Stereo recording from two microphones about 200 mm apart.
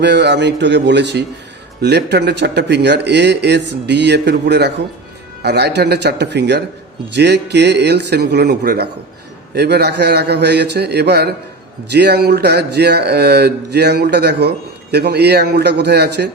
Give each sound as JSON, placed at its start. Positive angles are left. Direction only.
{"t": 0.0, "sound": "speech", "side_deg": -60}